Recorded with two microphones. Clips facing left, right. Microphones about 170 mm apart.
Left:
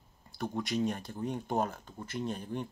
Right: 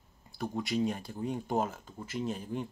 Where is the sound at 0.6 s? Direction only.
5° right (ahead or behind).